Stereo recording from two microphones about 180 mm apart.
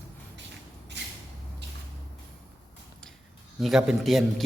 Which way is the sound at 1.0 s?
75° right (ahead or behind).